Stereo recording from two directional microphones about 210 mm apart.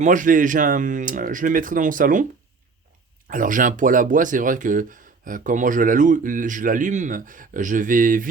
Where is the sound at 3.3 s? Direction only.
40° right (ahead or behind).